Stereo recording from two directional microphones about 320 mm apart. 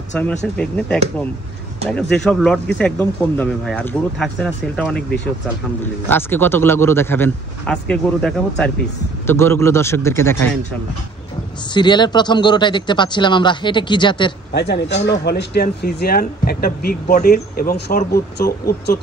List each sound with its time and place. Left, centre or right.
0.1 s speech: centre
2.1 s speech: centre
11.7 s speech: centre
14.5 s speech: left